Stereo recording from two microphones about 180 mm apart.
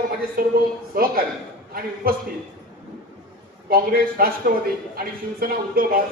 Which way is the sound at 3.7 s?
55° right (ahead or behind).